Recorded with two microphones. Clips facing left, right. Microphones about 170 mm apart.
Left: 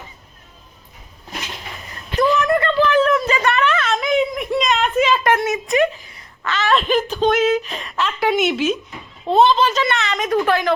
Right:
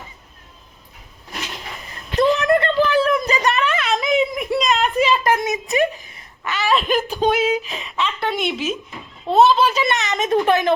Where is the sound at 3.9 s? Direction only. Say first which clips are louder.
Even; 5° right (ahead or behind).